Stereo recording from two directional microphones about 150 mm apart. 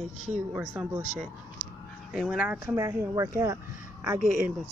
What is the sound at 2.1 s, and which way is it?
Speech, 5° right (ahead or behind).